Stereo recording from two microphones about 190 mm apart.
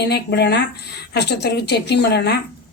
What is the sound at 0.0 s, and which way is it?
Speech, 60° left (ahead or behind).